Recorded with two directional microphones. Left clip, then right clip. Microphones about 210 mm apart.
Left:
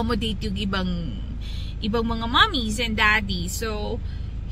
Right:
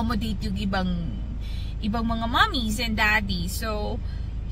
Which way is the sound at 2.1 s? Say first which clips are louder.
Left 2 dB; 10° right (ahead or behind).